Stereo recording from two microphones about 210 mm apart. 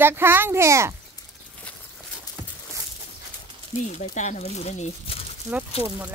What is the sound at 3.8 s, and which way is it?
Speech, 35° left (ahead or behind).